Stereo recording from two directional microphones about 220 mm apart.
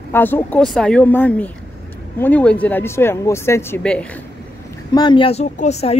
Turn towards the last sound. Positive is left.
turn(degrees=30)  # may be behind; listen again after turning